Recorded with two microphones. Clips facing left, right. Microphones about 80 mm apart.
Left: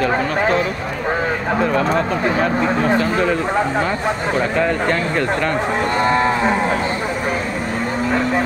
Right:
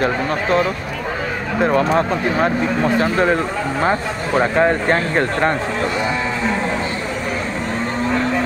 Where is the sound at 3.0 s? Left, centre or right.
Right.